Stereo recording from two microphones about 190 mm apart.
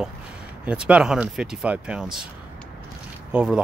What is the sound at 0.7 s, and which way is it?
Speech, 5° right (ahead or behind).